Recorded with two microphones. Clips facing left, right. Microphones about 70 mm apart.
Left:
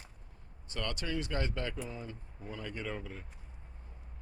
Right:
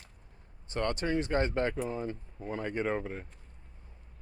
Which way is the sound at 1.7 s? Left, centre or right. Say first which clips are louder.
Right 8 dB; right.